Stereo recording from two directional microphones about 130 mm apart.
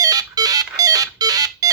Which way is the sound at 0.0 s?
30° right (ahead or behind).